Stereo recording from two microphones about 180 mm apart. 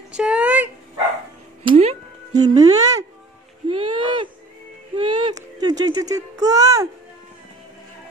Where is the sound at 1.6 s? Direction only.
35° right (ahead or behind).